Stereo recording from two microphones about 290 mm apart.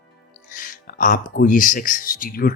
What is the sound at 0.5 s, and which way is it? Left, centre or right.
Speech, left.